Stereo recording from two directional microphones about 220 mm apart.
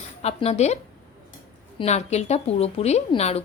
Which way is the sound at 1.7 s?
30° left (ahead or behind).